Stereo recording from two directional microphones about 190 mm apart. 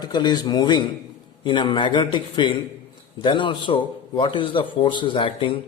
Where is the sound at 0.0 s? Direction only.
20° left (ahead or behind).